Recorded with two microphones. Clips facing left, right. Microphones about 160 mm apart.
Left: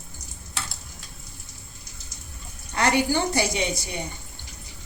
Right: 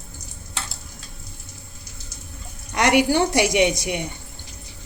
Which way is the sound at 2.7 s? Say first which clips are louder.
Right 4 dB; 75° right (ahead or behind).